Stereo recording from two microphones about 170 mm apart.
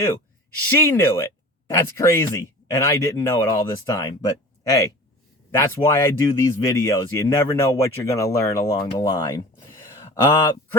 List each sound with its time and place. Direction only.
0.6 s speech: 15° left (ahead or behind)